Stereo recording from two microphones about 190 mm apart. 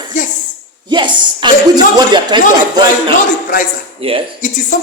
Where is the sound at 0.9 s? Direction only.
25° right (ahead or behind).